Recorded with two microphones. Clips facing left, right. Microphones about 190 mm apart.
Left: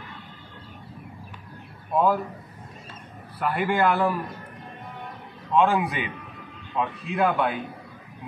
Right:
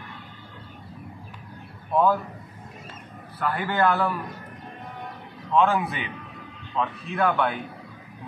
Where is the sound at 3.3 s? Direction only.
10° left (ahead or behind).